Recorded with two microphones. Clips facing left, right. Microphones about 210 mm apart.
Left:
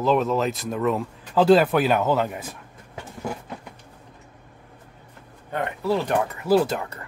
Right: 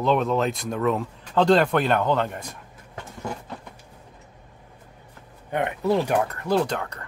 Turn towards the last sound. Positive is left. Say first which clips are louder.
# left 3 dB
turn(degrees=5)  # may be behind; listen again after turning